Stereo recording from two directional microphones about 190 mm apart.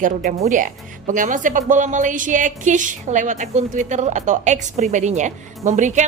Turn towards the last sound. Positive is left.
turn(degrees=-40)  # may be behind; listen again after turning